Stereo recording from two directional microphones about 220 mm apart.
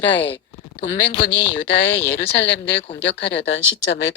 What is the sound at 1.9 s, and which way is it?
Speech, 10° left (ahead or behind).